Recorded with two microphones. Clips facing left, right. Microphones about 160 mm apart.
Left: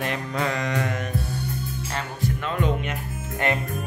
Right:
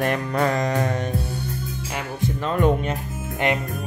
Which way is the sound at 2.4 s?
45° right (ahead or behind).